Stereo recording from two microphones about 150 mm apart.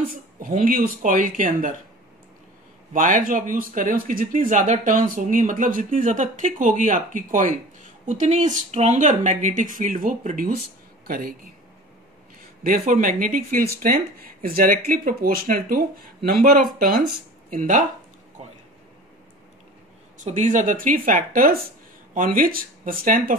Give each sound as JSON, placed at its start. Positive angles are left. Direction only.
{"t": 0.1, "sound": "speech", "side_deg": -70}
{"t": 2.9, "sound": "speech", "side_deg": -60}
{"t": 12.4, "sound": "speech", "side_deg": -70}
{"t": 17.5, "sound": "speech", "side_deg": -60}
{"t": 20.2, "sound": "speech", "side_deg": -50}